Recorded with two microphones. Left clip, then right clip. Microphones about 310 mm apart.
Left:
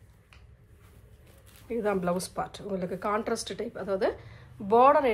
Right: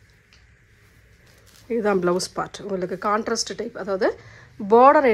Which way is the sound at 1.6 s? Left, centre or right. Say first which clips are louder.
Right 7 dB; right.